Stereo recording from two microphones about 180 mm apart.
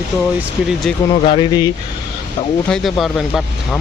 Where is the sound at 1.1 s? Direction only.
30° left (ahead or behind).